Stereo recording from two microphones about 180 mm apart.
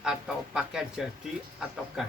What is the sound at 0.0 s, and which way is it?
Speech, 5° right (ahead or behind).